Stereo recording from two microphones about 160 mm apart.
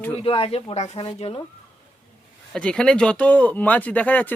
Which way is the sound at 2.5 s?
5° left (ahead or behind).